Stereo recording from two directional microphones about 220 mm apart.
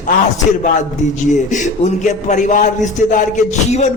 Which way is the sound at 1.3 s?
35° left (ahead or behind).